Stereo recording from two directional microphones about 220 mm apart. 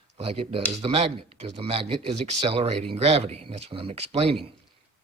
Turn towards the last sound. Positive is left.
turn(degrees=-25)  # may be behind; listen again after turning